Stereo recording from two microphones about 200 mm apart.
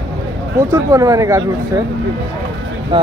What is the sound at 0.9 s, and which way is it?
Speech, 15° right (ahead or behind).